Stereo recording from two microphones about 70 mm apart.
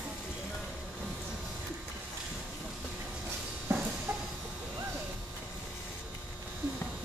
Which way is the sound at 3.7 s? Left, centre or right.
Right.